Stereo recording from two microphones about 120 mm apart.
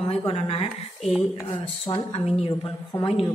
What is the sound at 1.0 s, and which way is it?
Speech, centre (ahead or behind).